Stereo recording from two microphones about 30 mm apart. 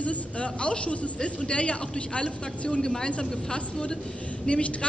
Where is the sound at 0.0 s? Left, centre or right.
Left.